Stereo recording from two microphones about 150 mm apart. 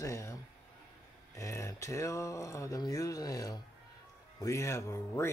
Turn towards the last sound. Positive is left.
turn(degrees=20)  # may be behind; listen again after turning